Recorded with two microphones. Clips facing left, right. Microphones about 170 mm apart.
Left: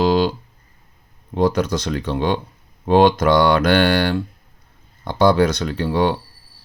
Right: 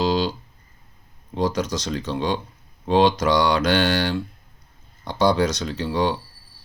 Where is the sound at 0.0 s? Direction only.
55° left (ahead or behind).